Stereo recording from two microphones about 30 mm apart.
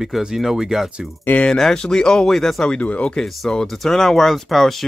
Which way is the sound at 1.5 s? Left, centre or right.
Centre.